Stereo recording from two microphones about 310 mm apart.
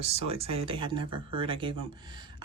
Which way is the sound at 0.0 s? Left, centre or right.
Centre.